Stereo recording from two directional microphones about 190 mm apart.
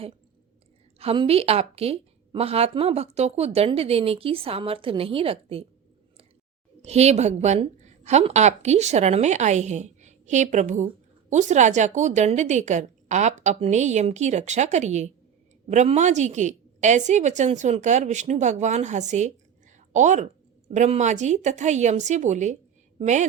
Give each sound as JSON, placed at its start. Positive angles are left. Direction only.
{"t": 0.9, "sound": "a woman's voice", "side_deg": -30}
{"t": 6.8, "sound": "a woman's voice", "side_deg": -35}